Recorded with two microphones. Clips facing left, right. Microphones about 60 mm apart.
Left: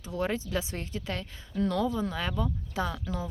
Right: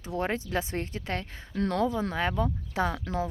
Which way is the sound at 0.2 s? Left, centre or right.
Right.